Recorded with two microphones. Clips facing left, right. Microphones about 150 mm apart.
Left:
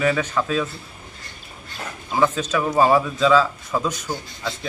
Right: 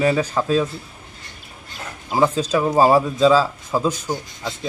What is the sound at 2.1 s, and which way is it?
A man's voice, 35° right (ahead or behind).